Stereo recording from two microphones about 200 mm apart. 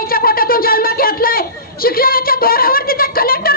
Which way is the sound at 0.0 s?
45° left (ahead or behind).